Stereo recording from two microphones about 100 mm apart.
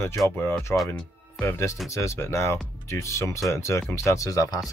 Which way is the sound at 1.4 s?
25° left (ahead or behind).